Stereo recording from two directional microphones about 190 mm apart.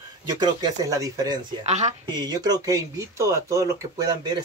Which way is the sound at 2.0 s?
20° right (ahead or behind).